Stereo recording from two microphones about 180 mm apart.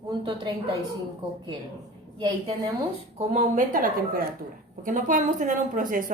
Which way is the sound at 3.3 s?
45° right (ahead or behind).